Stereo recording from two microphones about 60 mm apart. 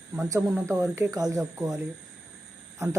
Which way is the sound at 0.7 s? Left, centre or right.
Right.